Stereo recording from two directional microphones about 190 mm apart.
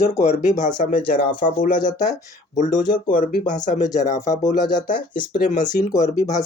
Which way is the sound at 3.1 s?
45° left (ahead or behind).